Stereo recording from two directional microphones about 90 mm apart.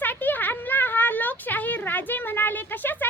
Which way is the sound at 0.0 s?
20° left (ahead or behind).